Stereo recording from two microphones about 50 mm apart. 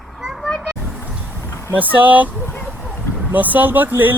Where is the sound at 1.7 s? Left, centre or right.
Right.